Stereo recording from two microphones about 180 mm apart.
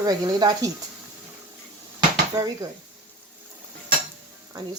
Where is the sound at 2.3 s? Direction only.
20° right (ahead or behind).